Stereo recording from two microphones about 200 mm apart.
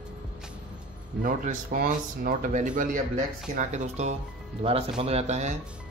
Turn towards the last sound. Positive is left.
turn(degrees=-35)  # may be behind; listen again after turning